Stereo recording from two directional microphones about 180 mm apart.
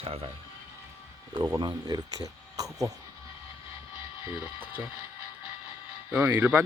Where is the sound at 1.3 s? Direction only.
20° right (ahead or behind).